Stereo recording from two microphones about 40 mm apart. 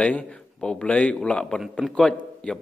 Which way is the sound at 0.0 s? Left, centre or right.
Left.